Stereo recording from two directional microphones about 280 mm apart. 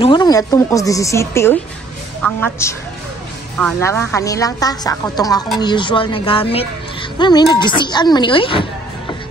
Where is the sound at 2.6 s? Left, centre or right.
Centre.